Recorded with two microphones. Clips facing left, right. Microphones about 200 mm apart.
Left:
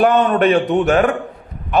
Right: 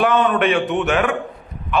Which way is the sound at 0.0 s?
40° left (ahead or behind).